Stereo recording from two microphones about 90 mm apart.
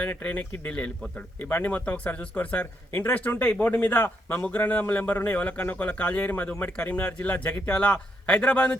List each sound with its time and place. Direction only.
0.0 s speech: 15° left (ahead or behind)